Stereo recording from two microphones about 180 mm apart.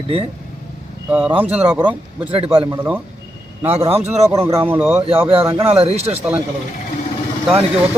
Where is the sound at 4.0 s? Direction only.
15° right (ahead or behind).